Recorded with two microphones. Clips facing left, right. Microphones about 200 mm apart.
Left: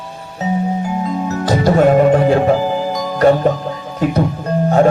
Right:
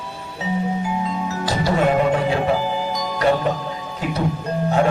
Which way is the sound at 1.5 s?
50° left (ahead or behind).